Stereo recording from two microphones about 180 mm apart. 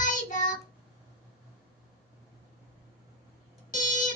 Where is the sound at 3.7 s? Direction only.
45° left (ahead or behind).